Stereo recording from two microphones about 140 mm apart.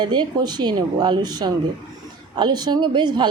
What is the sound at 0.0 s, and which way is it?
Speech, 30° right (ahead or behind).